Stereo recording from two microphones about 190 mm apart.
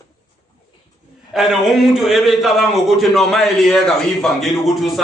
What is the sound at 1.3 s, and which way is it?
A man's voice, centre (ahead or behind).